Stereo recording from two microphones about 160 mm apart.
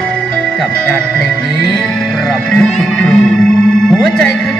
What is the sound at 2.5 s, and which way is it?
Music, 5° left (ahead or behind).